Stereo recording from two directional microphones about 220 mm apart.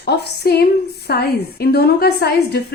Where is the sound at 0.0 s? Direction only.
45° left (ahead or behind).